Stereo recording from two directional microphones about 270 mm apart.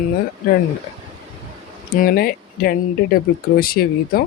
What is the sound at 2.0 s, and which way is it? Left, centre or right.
Speech, left.